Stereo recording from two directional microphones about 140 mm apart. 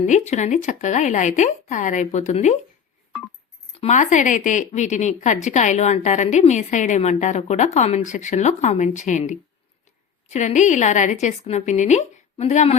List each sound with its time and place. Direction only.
0.0 s a woman's voice: 55° left (ahead or behind)
3.8 s a woman's voice: 55° left (ahead or behind)